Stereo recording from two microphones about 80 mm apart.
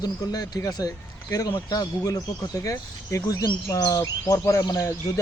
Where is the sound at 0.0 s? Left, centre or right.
Left.